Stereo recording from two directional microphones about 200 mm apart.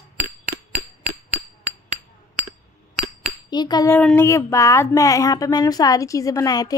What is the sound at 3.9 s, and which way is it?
Speech, 10° left (ahead or behind).